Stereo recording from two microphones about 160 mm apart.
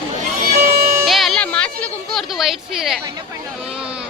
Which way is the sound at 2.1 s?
Centre (ahead or behind).